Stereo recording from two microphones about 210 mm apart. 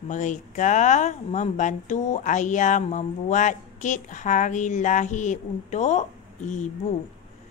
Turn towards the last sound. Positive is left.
turn(degrees=35)  # may be behind; listen again after turning